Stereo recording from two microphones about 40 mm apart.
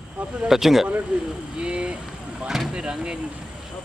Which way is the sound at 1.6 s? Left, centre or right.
Right.